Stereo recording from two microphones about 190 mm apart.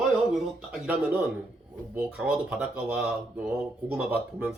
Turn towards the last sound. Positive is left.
turn(degrees=-10)  # may be behind; listen again after turning